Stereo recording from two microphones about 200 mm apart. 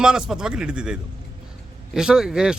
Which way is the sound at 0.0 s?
5° right (ahead or behind).